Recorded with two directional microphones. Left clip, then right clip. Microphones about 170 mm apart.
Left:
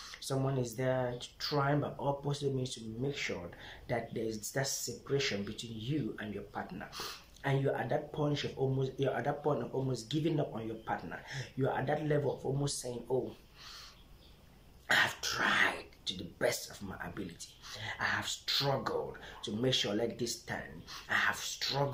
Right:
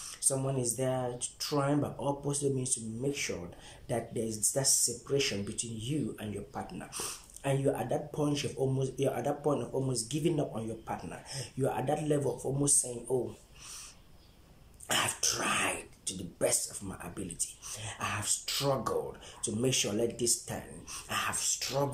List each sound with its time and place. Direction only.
0.2 s speech: 10° right (ahead or behind)
14.9 s speech: 10° right (ahead or behind)